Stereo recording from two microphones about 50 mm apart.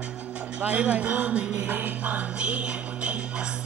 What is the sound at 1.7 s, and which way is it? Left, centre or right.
Music, right.